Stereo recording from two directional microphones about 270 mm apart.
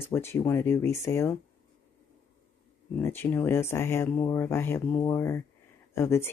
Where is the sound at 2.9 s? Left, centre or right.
Centre.